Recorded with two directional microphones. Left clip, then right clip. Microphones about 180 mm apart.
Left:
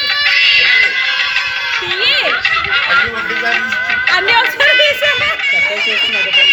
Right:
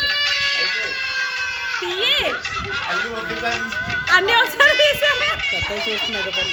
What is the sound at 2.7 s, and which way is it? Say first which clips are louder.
Music: left 9 dB; 30° left (ahead or behind).